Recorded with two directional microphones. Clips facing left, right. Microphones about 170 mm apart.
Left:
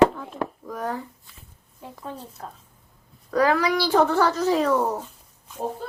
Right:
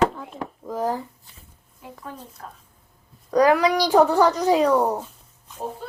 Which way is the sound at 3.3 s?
15° right (ahead or behind).